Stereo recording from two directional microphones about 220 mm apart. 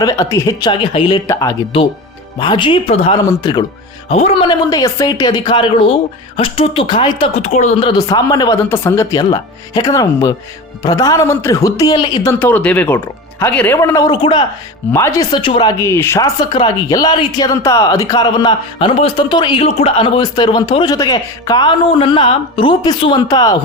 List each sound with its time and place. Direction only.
0.0 s a woman's voice: 15° left (ahead or behind)